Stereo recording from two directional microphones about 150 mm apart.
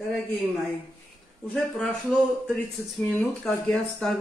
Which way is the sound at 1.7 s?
5° left (ahead or behind).